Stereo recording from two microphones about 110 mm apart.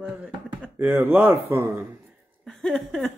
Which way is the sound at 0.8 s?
20° right (ahead or behind).